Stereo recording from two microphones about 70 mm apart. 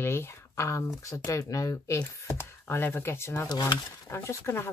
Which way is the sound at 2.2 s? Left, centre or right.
Left.